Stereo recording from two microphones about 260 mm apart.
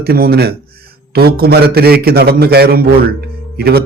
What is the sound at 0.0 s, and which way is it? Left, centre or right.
A man's voice, right.